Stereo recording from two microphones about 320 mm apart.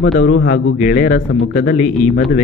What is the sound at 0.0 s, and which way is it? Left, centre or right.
Speech, left.